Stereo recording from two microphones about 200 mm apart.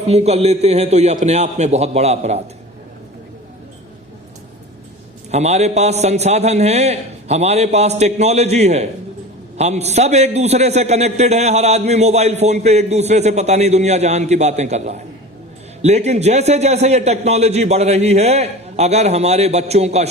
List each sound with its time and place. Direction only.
0.1 s a man's voice: 30° right (ahead or behind)
5.3 s a man's voice: 35° right (ahead or behind)